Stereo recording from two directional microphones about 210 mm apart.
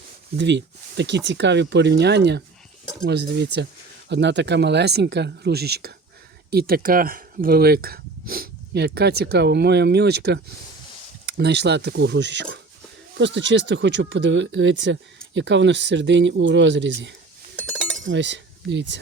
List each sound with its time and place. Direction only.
0.3 s speech: 55° right (ahead or behind)